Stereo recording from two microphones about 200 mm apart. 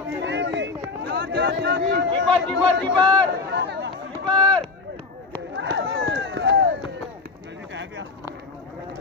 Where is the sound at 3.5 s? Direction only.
55° right (ahead or behind).